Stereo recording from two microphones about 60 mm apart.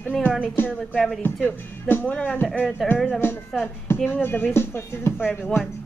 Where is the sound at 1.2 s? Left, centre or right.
Left.